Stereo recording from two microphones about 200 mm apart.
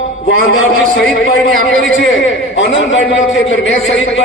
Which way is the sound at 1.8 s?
70° left (ahead or behind).